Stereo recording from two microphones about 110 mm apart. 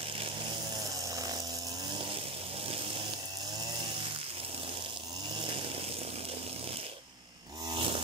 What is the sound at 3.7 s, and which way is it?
Chainsaw, 55° right (ahead or behind).